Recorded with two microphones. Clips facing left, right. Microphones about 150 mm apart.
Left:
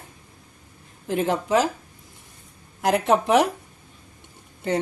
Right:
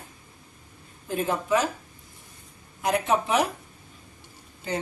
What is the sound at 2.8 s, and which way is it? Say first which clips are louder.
Speech: left 4 dB; 80° left.